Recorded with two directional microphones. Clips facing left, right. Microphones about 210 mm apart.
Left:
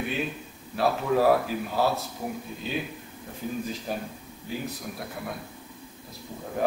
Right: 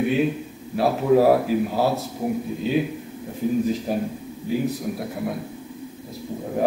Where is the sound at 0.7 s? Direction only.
10° right (ahead or behind).